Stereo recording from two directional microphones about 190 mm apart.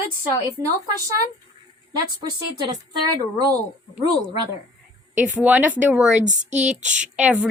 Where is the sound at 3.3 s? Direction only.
20° right (ahead or behind).